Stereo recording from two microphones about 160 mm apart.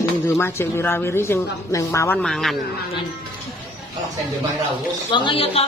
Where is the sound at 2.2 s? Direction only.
Centre (ahead or behind).